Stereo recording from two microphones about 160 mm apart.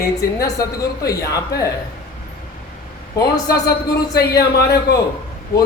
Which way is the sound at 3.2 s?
25° left (ahead or behind).